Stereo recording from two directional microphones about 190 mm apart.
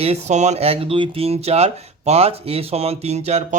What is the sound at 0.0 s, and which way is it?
Speech, 35° right (ahead or behind).